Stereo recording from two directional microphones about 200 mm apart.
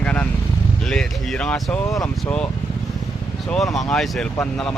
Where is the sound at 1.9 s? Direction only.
15° left (ahead or behind).